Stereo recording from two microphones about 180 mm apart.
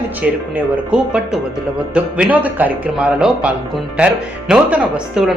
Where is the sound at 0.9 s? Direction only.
5° right (ahead or behind).